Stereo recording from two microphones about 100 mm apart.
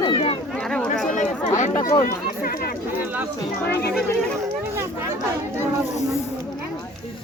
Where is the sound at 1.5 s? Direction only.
35° left (ahead or behind).